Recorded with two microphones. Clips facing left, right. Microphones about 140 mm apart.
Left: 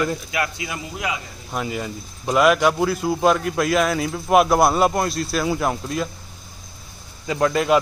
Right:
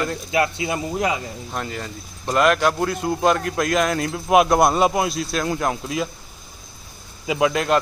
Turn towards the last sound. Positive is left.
turn(degrees=0)  # may be behind; listen again after turning